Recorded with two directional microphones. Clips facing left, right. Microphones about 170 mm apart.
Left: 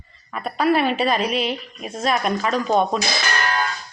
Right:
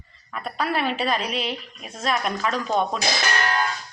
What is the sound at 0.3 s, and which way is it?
Speech, 10° left (ahead or behind).